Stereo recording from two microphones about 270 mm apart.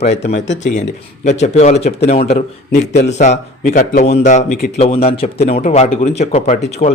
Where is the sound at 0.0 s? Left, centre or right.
Left.